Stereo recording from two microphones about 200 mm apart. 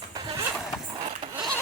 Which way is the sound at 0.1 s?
20° right (ahead or behind).